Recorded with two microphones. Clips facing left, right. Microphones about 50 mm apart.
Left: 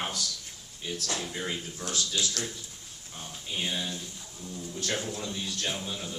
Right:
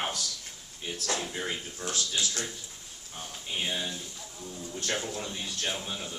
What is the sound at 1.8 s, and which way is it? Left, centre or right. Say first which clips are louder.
Speech: even; right.